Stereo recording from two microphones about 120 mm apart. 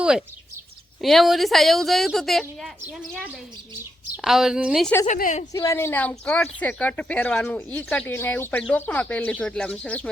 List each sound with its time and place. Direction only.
0.0 s speech: 5° right (ahead or behind)
4.2 s speech: 5° right (ahead or behind)
5.0 s a woman's voice: 85° left
5.6 s speech: 20° left (ahead or behind)